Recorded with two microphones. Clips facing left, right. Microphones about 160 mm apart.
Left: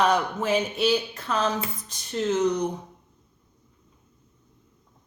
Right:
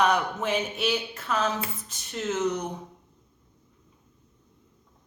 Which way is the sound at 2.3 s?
5° right (ahead or behind).